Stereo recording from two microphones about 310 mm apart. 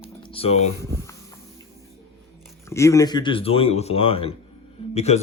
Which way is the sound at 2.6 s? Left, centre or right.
Centre.